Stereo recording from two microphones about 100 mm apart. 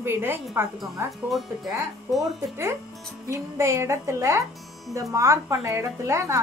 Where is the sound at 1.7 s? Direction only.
30° right (ahead or behind).